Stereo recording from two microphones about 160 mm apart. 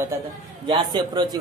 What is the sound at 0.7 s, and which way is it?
Speech, 30° right (ahead or behind).